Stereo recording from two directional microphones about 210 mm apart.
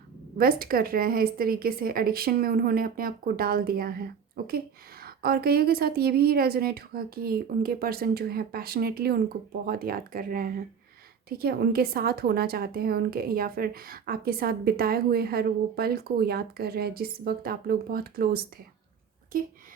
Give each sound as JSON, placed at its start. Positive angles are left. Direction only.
{"t": 0.3, "sound": "a woman's voice", "side_deg": -45}